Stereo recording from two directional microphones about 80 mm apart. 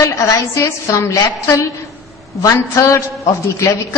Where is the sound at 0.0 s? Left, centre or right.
Left.